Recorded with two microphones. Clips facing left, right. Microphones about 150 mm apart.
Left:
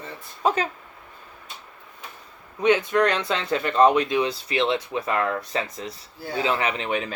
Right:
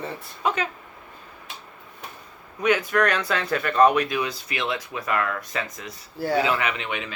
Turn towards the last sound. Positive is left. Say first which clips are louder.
# left 3 dB
turn(degrees=40)  # may be behind; listen again after turning